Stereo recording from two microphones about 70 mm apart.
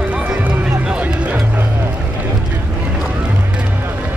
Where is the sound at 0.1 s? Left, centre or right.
Right.